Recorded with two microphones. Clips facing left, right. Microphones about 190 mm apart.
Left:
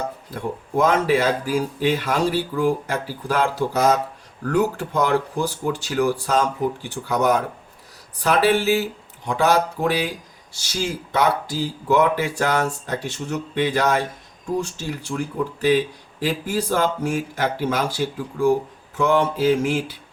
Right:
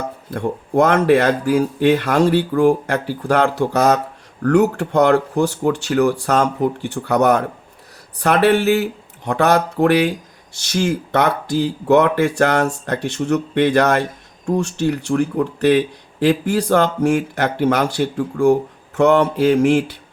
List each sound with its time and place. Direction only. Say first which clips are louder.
0.3 s speech: right 6 dB; 65° right (ahead or behind)